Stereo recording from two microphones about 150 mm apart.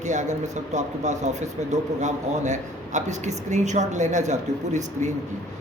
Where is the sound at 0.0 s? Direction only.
55° right (ahead or behind).